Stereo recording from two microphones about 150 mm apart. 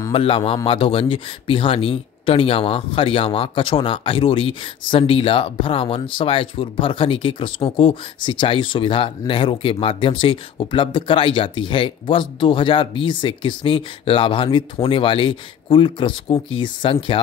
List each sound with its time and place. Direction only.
0.1 s speech: 35° left (ahead or behind)